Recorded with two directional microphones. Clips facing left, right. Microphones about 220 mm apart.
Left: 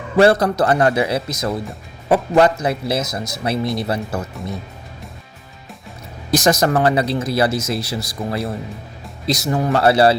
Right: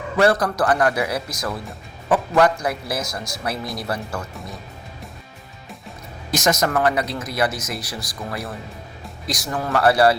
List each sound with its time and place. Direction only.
0.2 s speech: 25° left (ahead or behind)
6.3 s speech: 35° left (ahead or behind)